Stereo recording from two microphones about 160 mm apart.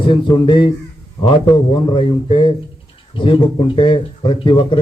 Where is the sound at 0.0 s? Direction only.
30° left (ahead or behind).